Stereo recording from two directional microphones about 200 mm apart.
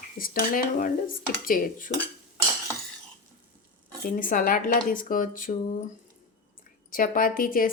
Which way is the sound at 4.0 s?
45° left (ahead or behind).